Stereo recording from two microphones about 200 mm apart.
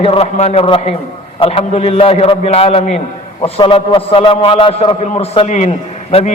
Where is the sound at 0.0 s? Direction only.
30° left (ahead or behind).